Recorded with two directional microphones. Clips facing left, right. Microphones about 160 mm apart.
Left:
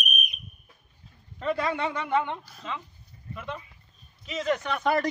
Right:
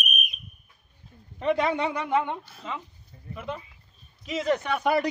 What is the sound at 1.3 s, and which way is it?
Speech, 20° right (ahead or behind).